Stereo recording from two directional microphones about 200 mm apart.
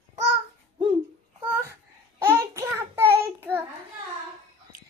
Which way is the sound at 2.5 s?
15° right (ahead or behind).